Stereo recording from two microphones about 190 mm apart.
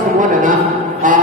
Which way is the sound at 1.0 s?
45° right (ahead or behind).